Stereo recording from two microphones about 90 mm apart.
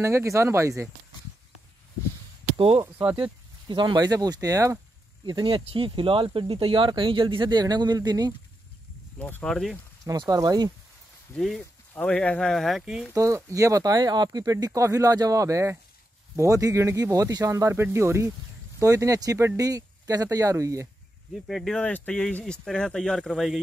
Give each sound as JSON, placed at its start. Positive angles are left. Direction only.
{"t": 0.0, "sound": "speech", "side_deg": -30}
{"t": 2.5, "sound": "speech", "side_deg": -90}
{"t": 3.2, "sound": "speech", "side_deg": -65}
{"t": 5.2, "sound": "speech", "side_deg": -60}
{"t": 9.4, "sound": "speech", "side_deg": 5}
{"t": 10.2, "sound": "speech", "side_deg": -45}
{"t": 11.3, "sound": "speech", "side_deg": 0}
{"t": 11.9, "sound": "speech", "side_deg": 15}
{"t": 13.1, "sound": "speech", "side_deg": -35}
{"t": 21.5, "sound": "speech", "side_deg": 0}
{"t": 21.8, "sound": "speech", "side_deg": 15}